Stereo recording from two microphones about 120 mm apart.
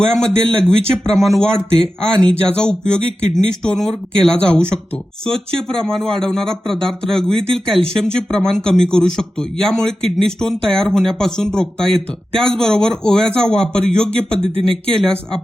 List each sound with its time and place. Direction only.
0.1 s speech: 5° left (ahead or behind)